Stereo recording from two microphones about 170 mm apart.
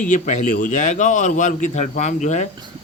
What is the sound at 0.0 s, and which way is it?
A man's voice, 45° left (ahead or behind).